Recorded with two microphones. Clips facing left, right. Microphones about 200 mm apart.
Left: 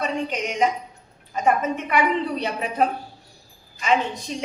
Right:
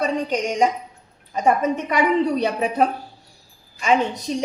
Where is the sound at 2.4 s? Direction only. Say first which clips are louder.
Right 5 dB; 45° right (ahead or behind).